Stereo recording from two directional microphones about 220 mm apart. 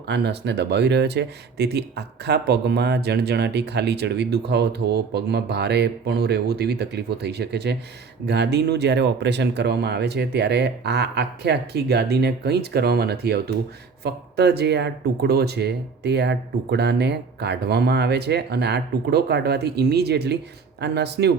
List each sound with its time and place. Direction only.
0.1 s speech: 50° right (ahead or behind)